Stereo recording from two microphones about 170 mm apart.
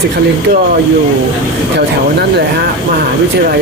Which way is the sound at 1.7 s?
75° right (ahead or behind).